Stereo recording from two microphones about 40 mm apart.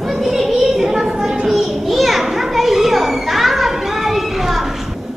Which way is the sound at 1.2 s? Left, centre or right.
Centre.